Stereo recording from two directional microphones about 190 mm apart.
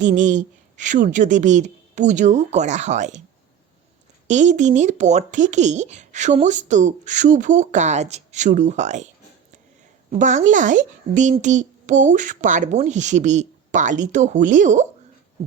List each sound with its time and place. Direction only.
0.0 s speech: 40° right (ahead or behind)
4.3 s speech: 40° right (ahead or behind)
10.1 s speech: 40° right (ahead or behind)